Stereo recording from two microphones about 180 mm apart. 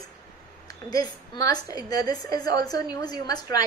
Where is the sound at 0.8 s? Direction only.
20° left (ahead or behind).